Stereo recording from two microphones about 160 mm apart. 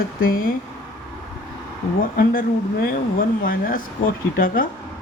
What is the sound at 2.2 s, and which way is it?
Speech, 65° left (ahead or behind).